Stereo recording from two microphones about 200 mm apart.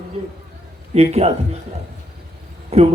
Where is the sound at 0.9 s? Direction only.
30° right (ahead or behind).